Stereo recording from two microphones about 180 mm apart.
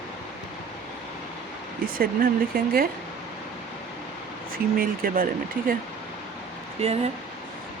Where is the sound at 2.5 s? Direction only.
55° right (ahead or behind).